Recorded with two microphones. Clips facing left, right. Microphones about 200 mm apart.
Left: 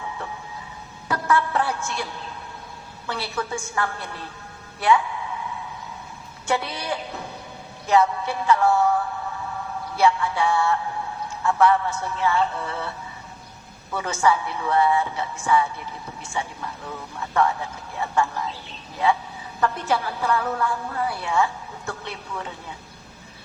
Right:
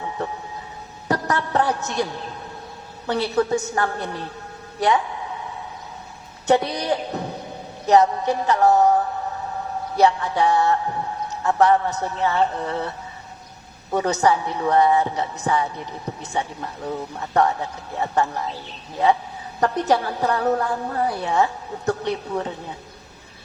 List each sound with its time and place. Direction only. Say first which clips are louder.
1.0 s music: even; 40° right (ahead or behind)
3.1 s speech: right 9 dB; 40° right (ahead or behind)
4.8 s a sound: even; 35° right (ahead or behind)
6.5 s speech: right 7 dB; 40° right (ahead or behind)
7.9 s music: right 4 dB; 40° right (ahead or behind)
9.9 s speech: right 2 dB; 40° right (ahead or behind)
13.9 s speech: right 3 dB; 40° right (ahead or behind)
19.8 s speech: right 4 dB; 40° right (ahead or behind)